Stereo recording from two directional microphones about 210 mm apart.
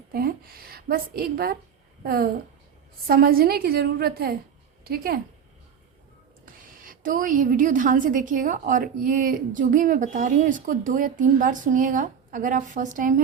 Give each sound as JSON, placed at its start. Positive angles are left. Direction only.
{"t": 0.1, "sound": "a woman's voice", "side_deg": -45}
{"t": 6.4, "sound": "a woman's voice", "side_deg": -40}